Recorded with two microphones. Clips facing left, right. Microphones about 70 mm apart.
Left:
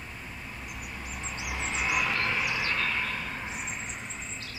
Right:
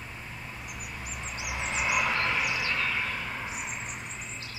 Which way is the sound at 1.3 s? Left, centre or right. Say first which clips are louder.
Right 1 dB; centre.